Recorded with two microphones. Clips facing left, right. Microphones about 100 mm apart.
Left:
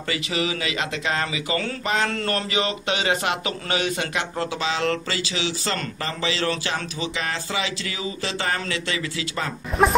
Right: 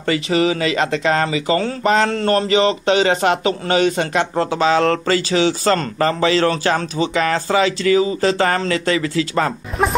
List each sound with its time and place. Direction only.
0.0 s a man's voice: 40° right (ahead or behind)
2.0 s a man's voice: 25° right (ahead or behind)
9.7 s speech: centre (ahead or behind)